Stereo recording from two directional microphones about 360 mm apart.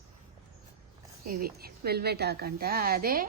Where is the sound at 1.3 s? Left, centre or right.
Right.